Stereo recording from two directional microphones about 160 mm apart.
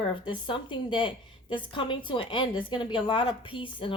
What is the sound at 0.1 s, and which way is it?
A woman's voice, 30° left (ahead or behind).